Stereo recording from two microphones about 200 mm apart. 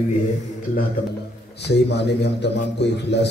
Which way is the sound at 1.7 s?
60° left (ahead or behind).